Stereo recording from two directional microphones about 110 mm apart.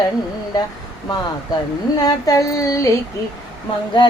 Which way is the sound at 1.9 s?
35° left (ahead or behind).